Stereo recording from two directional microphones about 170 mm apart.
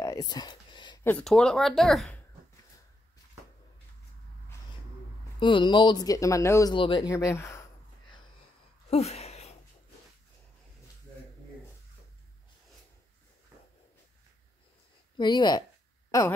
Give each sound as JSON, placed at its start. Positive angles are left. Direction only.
{"t": 0.0, "sound": "whispering", "side_deg": 20}
{"t": 1.2, "sound": "speech", "side_deg": 5}
{"t": 5.4, "sound": "speech", "side_deg": 30}
{"t": 6.7, "sound": "speech", "side_deg": 30}
{"t": 7.1, "sound": "speech", "side_deg": 15}
{"t": 8.9, "sound": "a sound", "side_deg": 35}
{"t": 15.1, "sound": "speech", "side_deg": 25}